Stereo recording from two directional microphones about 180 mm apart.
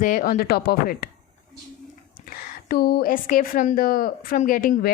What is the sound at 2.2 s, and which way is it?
A woman's voice, 60° left (ahead or behind).